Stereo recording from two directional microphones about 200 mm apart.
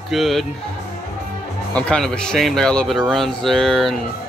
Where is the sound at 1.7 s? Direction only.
5° left (ahead or behind).